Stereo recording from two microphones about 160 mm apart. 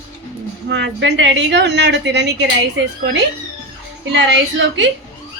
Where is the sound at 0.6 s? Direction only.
90° right.